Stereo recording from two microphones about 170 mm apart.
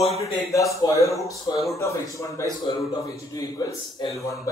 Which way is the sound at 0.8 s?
20° left (ahead or behind).